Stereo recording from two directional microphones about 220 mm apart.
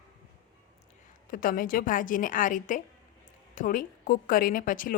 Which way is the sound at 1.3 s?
40° left (ahead or behind).